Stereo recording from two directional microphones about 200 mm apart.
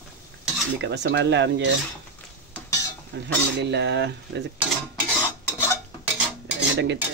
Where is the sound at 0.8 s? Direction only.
60° right (ahead or behind).